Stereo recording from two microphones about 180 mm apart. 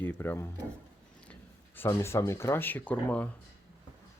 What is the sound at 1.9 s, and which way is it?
Speech, 15° left (ahead or behind).